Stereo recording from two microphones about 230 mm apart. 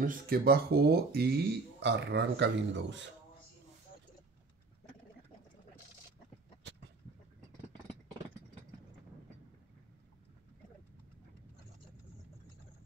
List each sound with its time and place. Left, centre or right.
0.0 s speech: right